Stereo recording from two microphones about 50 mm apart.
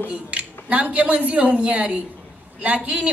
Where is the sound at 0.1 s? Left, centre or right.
Right.